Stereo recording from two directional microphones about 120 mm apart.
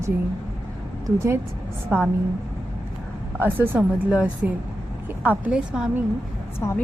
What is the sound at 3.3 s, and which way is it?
A woman's voice, 15° right (ahead or behind).